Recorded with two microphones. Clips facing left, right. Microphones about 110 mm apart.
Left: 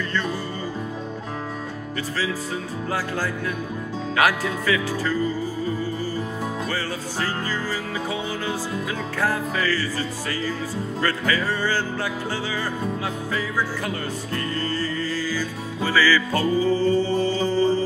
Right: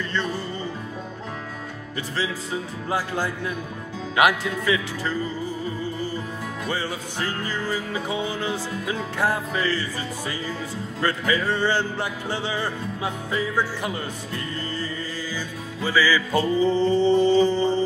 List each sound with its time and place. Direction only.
4.2 s music: 20° right (ahead or behind)
7.4 s music: 20° right (ahead or behind)